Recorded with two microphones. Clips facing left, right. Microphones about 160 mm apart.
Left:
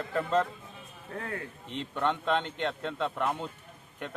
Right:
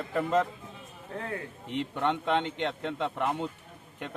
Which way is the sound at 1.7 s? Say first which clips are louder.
Right 1 dB; 15° right (ahead or behind).